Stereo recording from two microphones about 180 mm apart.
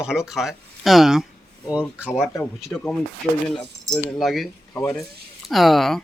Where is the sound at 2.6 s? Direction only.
5° left (ahead or behind).